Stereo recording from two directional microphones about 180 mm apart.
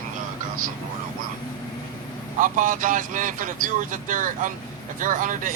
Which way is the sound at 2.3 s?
45° right (ahead or behind).